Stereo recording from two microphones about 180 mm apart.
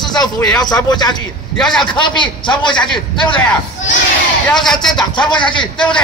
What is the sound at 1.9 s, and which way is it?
A man's voice, 25° left (ahead or behind).